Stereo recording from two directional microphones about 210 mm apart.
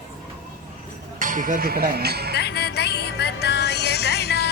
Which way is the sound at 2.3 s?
50° left (ahead or behind).